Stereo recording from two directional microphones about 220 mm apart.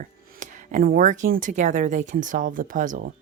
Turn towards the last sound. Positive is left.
turn(degrees=-35)  # may be behind; listen again after turning